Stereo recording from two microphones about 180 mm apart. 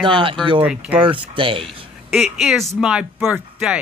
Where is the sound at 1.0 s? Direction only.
30° right (ahead or behind).